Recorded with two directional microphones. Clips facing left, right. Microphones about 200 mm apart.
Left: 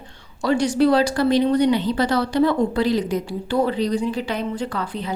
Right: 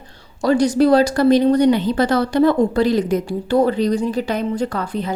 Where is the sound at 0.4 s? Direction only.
40° right (ahead or behind).